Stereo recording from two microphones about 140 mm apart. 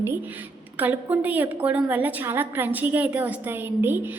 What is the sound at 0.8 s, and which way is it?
A woman's voice, 10° right (ahead or behind).